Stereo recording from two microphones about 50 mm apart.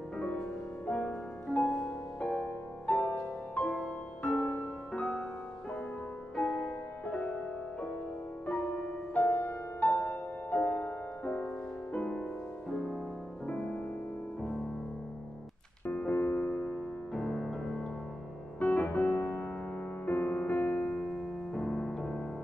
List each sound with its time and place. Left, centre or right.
0.8 s music: left
3.6 s music: centre
6.3 s music: centre
7.1 s music: left
13.5 s music: left
15.9 s music: left
17.1 s music: centre
18.6 s music: left
21.5 s music: centre